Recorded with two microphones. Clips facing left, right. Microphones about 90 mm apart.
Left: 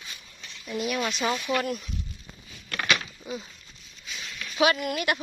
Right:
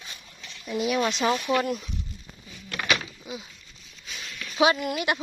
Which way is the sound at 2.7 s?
10° right (ahead or behind).